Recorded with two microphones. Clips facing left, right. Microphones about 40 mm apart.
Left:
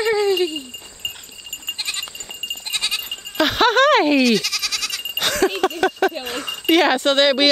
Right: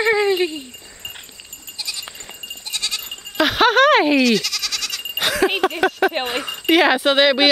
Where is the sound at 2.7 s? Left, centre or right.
Centre.